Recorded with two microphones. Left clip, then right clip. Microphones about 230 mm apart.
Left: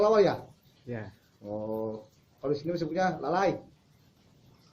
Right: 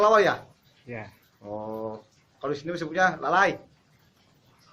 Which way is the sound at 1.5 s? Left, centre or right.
Centre.